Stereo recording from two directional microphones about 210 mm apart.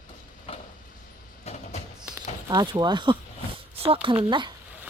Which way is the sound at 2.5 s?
20° right (ahead or behind).